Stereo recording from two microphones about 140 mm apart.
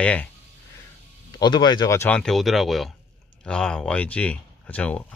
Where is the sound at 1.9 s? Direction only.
10° left (ahead or behind).